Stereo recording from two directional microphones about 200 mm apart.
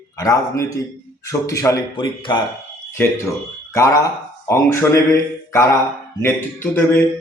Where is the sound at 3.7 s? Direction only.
15° left (ahead or behind).